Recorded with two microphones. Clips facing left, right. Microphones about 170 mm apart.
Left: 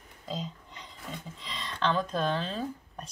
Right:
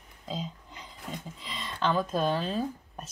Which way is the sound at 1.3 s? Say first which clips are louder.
Even; centre (ahead or behind).